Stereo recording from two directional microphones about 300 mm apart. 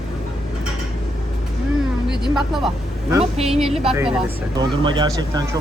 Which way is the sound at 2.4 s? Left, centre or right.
Centre.